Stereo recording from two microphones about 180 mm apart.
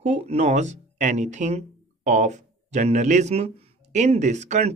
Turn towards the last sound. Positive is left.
turn(degrees=-40)  # may be behind; listen again after turning